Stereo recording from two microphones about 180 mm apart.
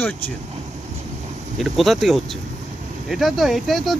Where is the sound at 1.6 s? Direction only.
Centre (ahead or behind).